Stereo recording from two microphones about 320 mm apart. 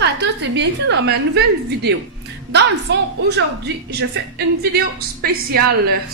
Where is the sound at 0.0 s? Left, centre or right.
Right.